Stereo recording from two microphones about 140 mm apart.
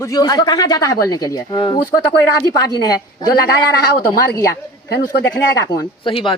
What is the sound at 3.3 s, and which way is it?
Speech, 90° left.